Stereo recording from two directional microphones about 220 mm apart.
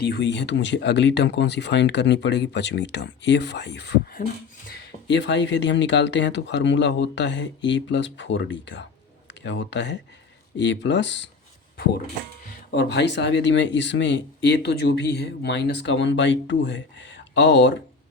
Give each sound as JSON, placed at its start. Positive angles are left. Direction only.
{"t": 0.0, "sound": "speech", "side_deg": 50}
{"t": 12.5, "sound": "speech", "side_deg": 50}